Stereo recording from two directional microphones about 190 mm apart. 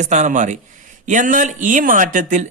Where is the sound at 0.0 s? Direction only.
40° right (ahead or behind).